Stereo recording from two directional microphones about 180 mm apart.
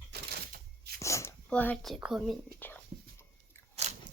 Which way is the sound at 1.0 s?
15° left (ahead or behind).